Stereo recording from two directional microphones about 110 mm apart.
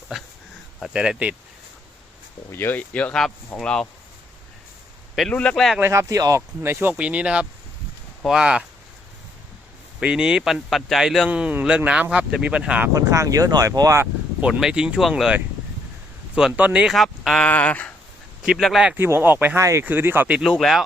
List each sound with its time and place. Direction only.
0.9 s speech: 10° right (ahead or behind)
2.5 s speech: 20° left (ahead or behind)
5.3 s speech: 10° left (ahead or behind)
5.8 s speech: 25° right (ahead or behind); by 8.6 s 10° right (ahead or behind)
10.0 s speech: 10° right (ahead or behind)
11.3 s speech: 10° right (ahead or behind)
12.9 s speech: 30° right (ahead or behind)
14.4 s speech: 10° right (ahead or behind)
16.5 s speech: 15° right (ahead or behind)
16.9 s speech: centre (ahead or behind)
17.5 s speech: 15° left (ahead or behind)
18.4 s speech: centre (ahead or behind)
18.9 s speech: 20° right (ahead or behind)
20.4 s speech: centre (ahead or behind)